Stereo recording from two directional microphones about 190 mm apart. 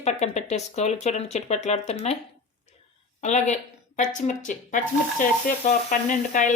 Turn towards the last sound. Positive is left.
turn(degrees=40)  # may be behind; listen again after turning